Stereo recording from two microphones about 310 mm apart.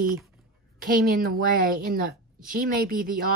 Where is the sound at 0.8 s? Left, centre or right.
Right.